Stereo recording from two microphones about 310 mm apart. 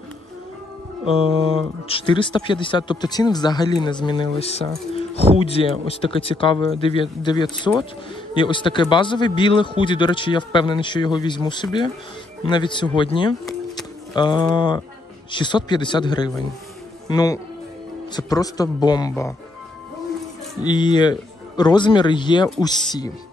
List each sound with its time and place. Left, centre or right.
1.9 s a man's voice: centre
20.6 s a man's voice: centre